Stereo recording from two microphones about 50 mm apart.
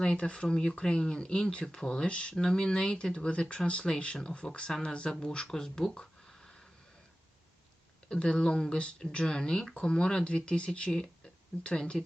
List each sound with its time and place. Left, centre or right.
0.0 s speech: centre
8.1 s speech: centre